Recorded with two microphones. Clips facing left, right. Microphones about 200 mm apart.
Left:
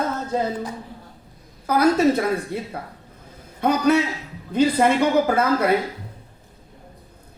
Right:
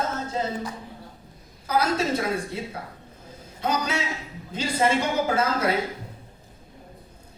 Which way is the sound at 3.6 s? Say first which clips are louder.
Left 9 dB; 60° left (ahead or behind).